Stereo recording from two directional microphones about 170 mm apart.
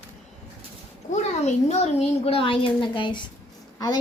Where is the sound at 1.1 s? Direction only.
40° left (ahead or behind).